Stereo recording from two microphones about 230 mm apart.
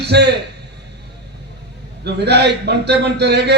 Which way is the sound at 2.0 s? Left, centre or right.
Right.